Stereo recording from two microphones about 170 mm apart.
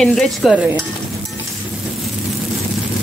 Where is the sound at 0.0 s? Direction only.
Centre (ahead or behind).